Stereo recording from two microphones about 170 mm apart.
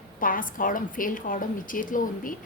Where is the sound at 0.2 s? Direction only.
55° left (ahead or behind).